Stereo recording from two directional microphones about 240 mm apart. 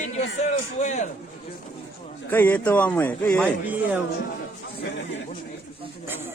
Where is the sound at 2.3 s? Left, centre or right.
Centre.